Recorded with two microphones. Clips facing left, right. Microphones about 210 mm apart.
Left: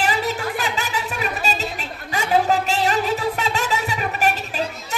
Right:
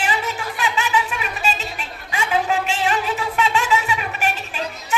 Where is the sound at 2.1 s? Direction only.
40° left (ahead or behind).